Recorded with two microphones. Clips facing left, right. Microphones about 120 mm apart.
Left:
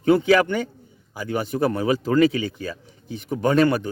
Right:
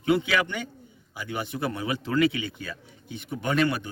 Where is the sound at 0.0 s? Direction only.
40° left (ahead or behind).